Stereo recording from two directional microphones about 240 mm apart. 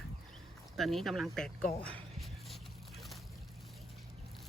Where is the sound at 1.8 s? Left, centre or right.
Centre.